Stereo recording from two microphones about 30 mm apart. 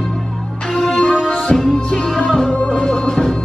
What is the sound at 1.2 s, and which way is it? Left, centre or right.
Music, left.